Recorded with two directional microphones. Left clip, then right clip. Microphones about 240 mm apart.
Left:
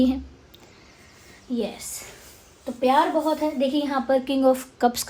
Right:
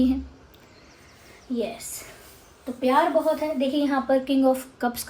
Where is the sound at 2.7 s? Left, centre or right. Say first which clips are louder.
Left 1 dB; left.